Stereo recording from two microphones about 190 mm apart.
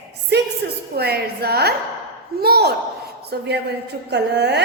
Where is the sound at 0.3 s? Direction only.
60° right (ahead or behind).